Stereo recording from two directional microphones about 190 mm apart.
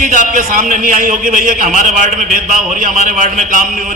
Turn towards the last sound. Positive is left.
turn(degrees=-45)  # may be behind; listen again after turning